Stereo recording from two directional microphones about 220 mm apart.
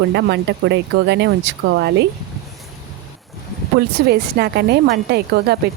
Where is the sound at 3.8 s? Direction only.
45° right (ahead or behind).